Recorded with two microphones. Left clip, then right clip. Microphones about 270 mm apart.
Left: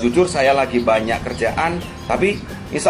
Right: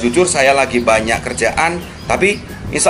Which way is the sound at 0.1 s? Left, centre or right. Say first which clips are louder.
Right 4 dB; centre.